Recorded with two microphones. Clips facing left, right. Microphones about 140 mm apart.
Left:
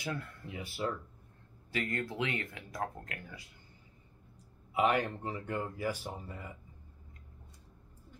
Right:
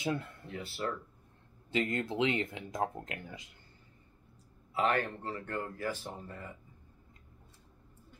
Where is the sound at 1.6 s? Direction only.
20° right (ahead or behind).